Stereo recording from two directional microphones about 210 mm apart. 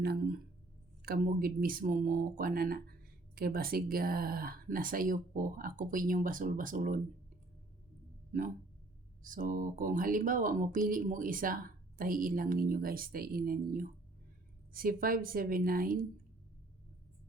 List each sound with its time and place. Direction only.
0.0 s speech: 50° right (ahead or behind)
9.2 s speech: 40° right (ahead or behind)